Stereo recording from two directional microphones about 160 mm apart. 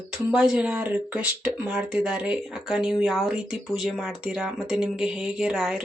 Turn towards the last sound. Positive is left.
turn(degrees=-5)  # may be behind; listen again after turning